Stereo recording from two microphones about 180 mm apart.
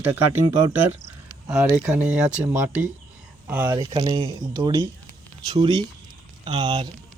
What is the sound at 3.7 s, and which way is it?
Speech, 25° right (ahead or behind).